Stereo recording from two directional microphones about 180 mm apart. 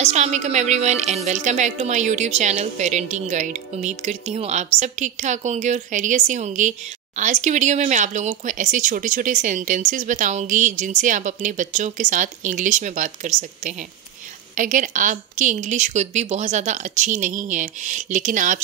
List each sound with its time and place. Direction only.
0.0 s a woman's voice: 40° right (ahead or behind)